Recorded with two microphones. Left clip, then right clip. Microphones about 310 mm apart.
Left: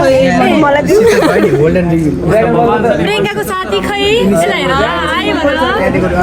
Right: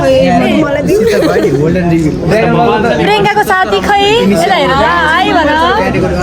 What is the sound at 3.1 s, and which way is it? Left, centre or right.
A woman's voice, right.